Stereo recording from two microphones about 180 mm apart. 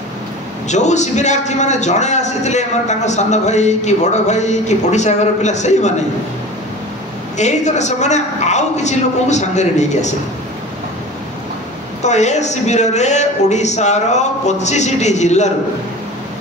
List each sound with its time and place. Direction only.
0.7 s a man's voice: 40° left (ahead or behind)
7.3 s a man's voice: 40° left (ahead or behind)
12.0 s a man's voice: 40° left (ahead or behind)